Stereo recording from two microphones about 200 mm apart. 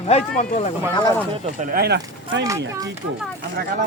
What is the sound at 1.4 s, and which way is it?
Speech, 35° right (ahead or behind).